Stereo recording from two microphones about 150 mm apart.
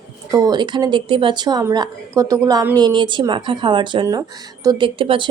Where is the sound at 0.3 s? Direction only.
25° right (ahead or behind).